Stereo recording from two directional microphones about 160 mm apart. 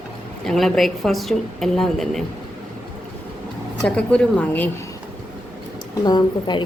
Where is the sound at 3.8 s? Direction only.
5° left (ahead or behind).